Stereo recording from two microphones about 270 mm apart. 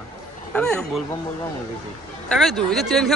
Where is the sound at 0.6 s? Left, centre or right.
Centre.